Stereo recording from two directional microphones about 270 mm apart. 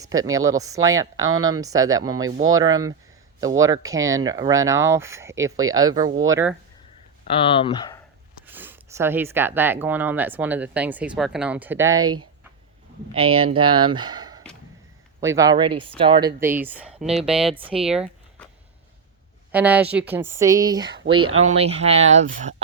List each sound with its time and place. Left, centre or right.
0.0 s speech: centre
7.3 s speech: centre
8.4 s speech: centre
12.0 s speech: right
13.4 s speech: right
13.8 s speech: centre
17.5 s speech: centre
17.7 s a sound: centre
19.5 s speech: centre; by 22.5 s right